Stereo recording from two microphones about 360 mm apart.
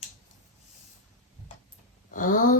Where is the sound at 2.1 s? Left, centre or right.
Left.